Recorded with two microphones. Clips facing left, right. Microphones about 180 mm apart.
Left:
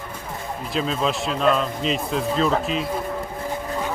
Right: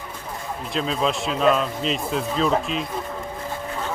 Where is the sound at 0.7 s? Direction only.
Centre (ahead or behind).